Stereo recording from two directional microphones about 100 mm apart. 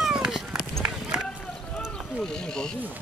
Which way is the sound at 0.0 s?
5° right (ahead or behind).